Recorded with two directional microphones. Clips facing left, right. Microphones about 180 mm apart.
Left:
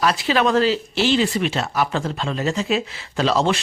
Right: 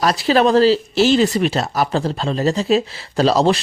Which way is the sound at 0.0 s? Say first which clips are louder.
Right 4 dB; 40° right (ahead or behind).